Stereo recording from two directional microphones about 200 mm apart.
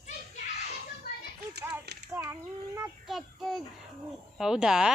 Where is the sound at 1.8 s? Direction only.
55° right (ahead or behind).